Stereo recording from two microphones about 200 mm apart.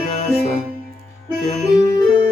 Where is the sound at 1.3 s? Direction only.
30° left (ahead or behind).